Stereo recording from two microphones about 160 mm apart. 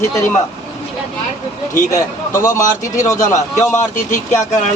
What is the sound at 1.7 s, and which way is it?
A man's voice, 20° left (ahead or behind).